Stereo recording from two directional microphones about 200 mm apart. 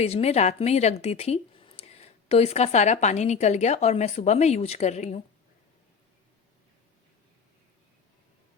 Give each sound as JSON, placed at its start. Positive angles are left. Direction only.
{"t": 0.0, "sound": "a woman's voice", "side_deg": 30}